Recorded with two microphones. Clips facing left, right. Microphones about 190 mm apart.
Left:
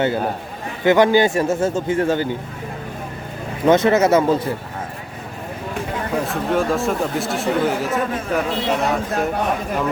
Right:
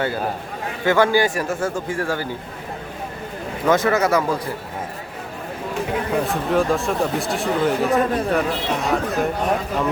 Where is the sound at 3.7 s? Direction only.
20° left (ahead or behind).